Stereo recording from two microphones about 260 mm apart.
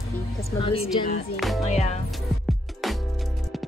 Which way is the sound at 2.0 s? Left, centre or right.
Centre.